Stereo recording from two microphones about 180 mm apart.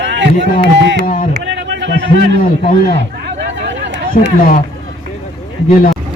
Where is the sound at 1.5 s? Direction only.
80° right.